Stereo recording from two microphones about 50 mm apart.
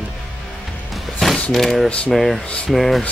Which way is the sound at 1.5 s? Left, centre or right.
Centre.